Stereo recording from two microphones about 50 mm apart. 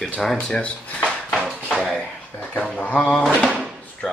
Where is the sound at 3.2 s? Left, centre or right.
Centre.